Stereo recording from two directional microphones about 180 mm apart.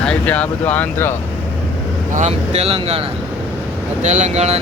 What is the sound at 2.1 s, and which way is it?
Speech, 40° right (ahead or behind).